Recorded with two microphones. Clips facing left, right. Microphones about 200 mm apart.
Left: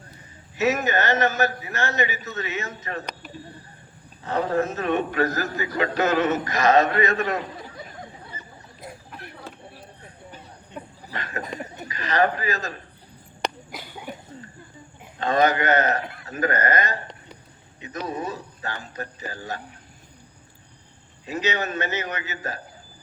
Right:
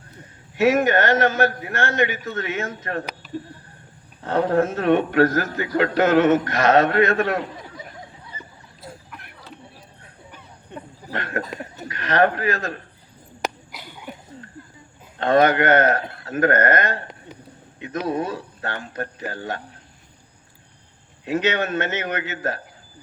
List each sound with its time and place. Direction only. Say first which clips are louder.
0.5 s a man's voice: right 5 dB; 55° right (ahead or behind)
4.2 s a man's voice: right 4 dB; 55° right (ahead or behind)
11.1 s a sound: right 6 dB; 60° right (ahead or behind)
11.9 s a man's voice: right 3 dB; 60° right (ahead or behind)
13.4 s cough: right 1 dB; 5° right (ahead or behind)
15.2 s a man's voice: right 4 dB; 55° right (ahead or behind)
21.2 s a man's voice: right 5 dB; 55° right (ahead or behind)